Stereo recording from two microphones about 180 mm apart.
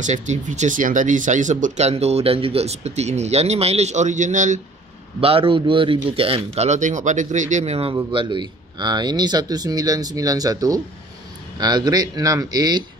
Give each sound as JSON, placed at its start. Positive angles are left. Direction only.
{"t": 0.0, "sound": "speech", "side_deg": -40}
{"t": 5.2, "sound": "speech", "side_deg": -30}